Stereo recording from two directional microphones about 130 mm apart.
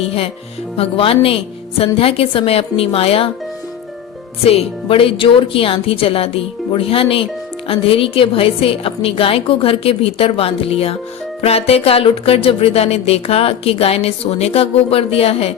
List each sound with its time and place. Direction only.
0.0 s music: 50° left (ahead or behind)
4.4 s music: 45° left (ahead or behind)